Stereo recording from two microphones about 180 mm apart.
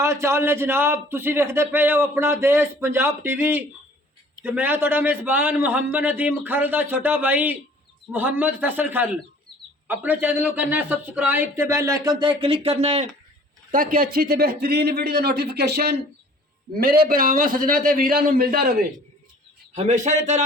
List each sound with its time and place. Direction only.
0.0 s a man's voice: 15° right (ahead or behind); by 13.1 s 35° right (ahead or behind)
13.7 s a man's voice: 50° right (ahead or behind)
19.7 s a man's voice: 40° right (ahead or behind)